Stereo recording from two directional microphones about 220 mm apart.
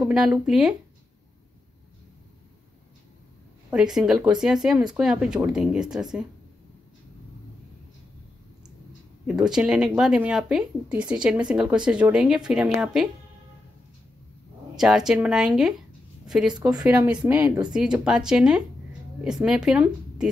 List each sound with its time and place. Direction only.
0.0 s speech: centre (ahead or behind)
3.7 s speech: 5° right (ahead or behind)
9.3 s speech: 5° right (ahead or behind)
14.8 s speech: 5° right (ahead or behind)
16.5 s speech: 20° right (ahead or behind)
16.8 s speech: 5° right (ahead or behind)